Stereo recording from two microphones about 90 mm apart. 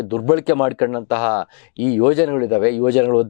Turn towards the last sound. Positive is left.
turn(degrees=20)  # may be behind; listen again after turning